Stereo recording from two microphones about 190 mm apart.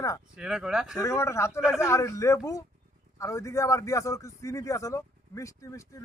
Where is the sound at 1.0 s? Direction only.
15° left (ahead or behind).